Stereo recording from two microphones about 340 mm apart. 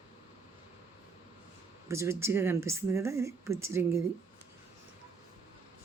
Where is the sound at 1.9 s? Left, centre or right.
Centre.